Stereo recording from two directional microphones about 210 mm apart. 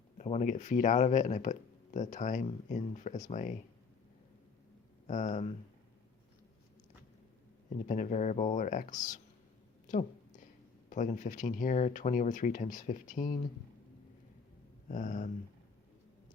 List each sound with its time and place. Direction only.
0.2 s speech: 35° left (ahead or behind)
5.0 s speech: 35° left (ahead or behind)
7.9 s speech: 35° left (ahead or behind)
9.8 s a sound: 35° left (ahead or behind)
10.8 s speech: 35° left (ahead or behind)
14.8 s a sound: 40° left (ahead or behind)